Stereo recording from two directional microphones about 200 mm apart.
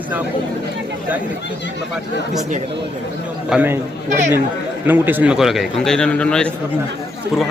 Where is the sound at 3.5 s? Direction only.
10° right (ahead or behind).